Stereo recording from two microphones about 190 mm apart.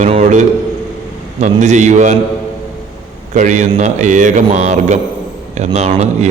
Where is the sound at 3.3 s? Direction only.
40° right (ahead or behind).